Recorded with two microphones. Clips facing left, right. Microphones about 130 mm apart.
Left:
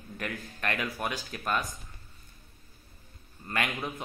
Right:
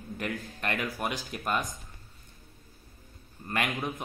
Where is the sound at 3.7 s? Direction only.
15° right (ahead or behind).